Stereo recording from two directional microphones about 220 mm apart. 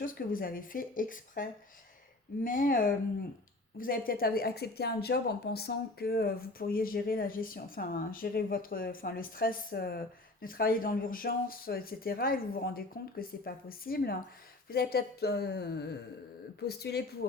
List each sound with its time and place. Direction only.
0.0 s a woman's voice: 40° left (ahead or behind)